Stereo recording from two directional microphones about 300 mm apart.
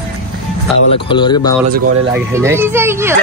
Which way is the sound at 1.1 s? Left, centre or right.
Centre.